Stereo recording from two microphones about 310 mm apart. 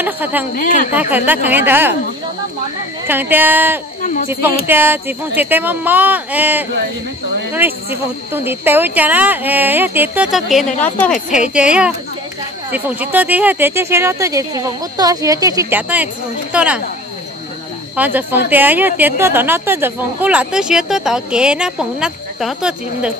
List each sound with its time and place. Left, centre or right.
0.0 s a woman's voice: centre
0.6 s a woman's voice: left
0.9 s a woman's voice: centre
3.1 s speech: centre
4.0 s speech: left
4.6 s a woman's voice: centre
8.3 s a woman's voice: centre
17.9 s a woman's voice: centre